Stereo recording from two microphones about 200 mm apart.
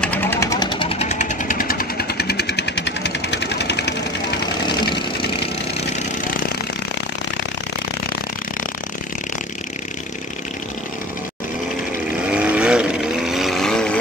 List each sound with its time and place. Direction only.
0.0 s vehicle: 10° left (ahead or behind); by 3.9 s 60° left (ahead or behind)
12.3 s vehicle: 5° right (ahead or behind)